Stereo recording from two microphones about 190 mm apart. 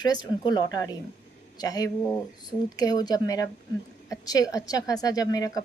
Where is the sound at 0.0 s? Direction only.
20° left (ahead or behind).